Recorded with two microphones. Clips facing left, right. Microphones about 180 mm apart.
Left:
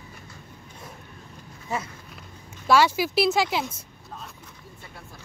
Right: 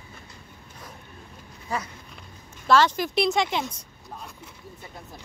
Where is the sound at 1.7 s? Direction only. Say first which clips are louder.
Even; 20° left (ahead or behind).